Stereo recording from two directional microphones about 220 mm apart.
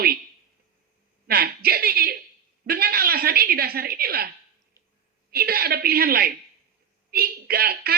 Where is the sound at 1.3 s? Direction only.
45° right (ahead or behind).